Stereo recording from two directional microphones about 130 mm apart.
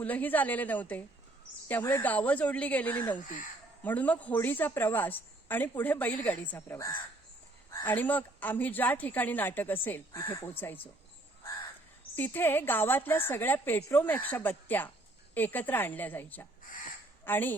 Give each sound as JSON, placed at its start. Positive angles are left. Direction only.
{"t": 0.0, "sound": "a woman's voice", "side_deg": 10}
{"t": 3.2, "sound": "speech", "side_deg": 90}
{"t": 3.8, "sound": "a woman's voice", "side_deg": 10}
{"t": 12.1, "sound": "a woman's voice", "side_deg": 15}